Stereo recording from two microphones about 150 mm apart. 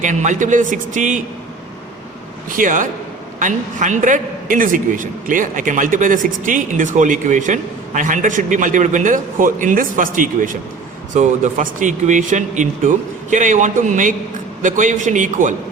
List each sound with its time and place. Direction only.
0.0 s a man's voice: 55° right (ahead or behind)
2.6 s a man's voice: 60° right (ahead or behind)